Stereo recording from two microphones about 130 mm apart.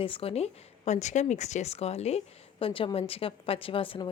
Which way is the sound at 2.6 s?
40° left (ahead or behind).